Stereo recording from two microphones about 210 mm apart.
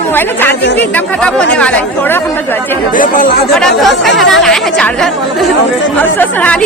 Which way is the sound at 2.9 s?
40° left (ahead or behind).